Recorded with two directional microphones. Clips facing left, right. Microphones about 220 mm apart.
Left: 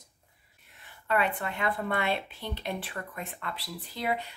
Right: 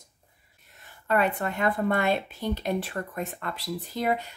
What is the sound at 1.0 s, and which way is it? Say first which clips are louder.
Speech: right 4 dB; 45° right (ahead or behind).